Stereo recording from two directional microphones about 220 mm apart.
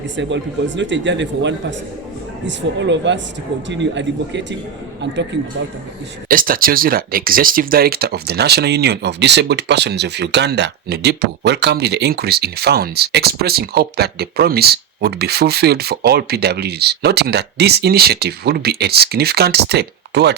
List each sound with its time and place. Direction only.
0.2 s speech: 55° right (ahead or behind)
6.2 s speech: 40° right (ahead or behind)